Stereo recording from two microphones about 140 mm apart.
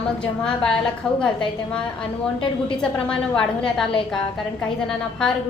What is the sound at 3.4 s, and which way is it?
A woman's voice, 5° left (ahead or behind).